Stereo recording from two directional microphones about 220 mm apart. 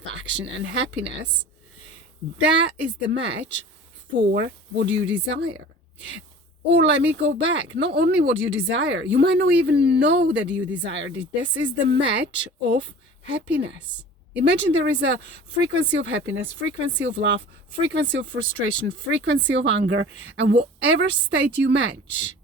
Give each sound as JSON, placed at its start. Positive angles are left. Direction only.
{"t": 0.0, "sound": "speech", "side_deg": -55}
{"t": 2.6, "sound": "speech", "side_deg": -50}
{"t": 6.7, "sound": "speech", "side_deg": -55}
{"t": 10.5, "sound": "speech", "side_deg": -5}
{"t": 10.8, "sound": "speech", "side_deg": -55}